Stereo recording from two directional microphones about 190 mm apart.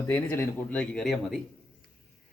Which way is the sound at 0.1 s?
10° left (ahead or behind).